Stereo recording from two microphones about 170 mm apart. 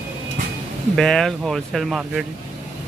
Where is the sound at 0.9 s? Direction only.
Centre (ahead or behind).